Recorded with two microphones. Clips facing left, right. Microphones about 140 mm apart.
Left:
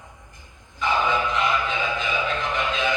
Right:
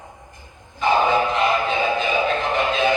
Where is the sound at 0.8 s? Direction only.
45° right (ahead or behind).